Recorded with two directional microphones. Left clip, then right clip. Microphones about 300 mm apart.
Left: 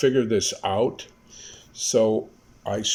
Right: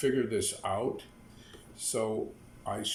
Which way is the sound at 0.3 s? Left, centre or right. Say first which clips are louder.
Left 9 dB; left.